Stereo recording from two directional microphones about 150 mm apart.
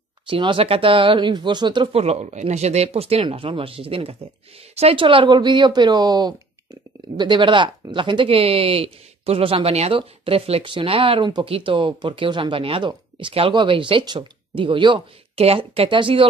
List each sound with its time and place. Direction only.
0.3 s speech: 35° right (ahead or behind)